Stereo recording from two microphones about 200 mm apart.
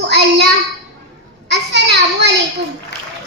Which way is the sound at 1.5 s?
55° right (ahead or behind).